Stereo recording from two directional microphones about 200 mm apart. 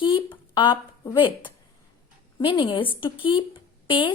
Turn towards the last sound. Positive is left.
turn(degrees=25)  # may be behind; listen again after turning